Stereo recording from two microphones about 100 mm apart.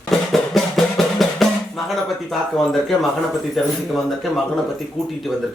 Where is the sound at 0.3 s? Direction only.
Centre (ahead or behind).